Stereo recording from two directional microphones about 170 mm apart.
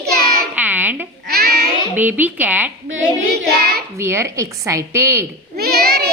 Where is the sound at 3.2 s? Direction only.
60° right (ahead or behind).